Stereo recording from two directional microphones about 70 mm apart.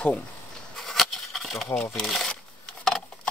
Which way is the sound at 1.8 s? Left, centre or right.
Centre.